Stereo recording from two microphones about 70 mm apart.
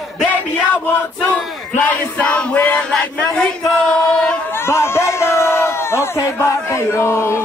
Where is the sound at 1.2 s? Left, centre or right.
Left.